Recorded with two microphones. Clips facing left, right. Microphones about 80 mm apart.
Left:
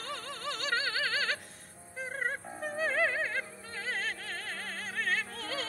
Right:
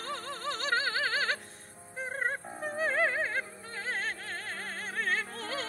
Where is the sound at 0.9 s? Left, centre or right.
Centre.